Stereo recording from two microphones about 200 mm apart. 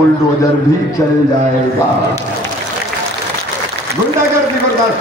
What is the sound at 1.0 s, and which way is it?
Speech, 10° left (ahead or behind).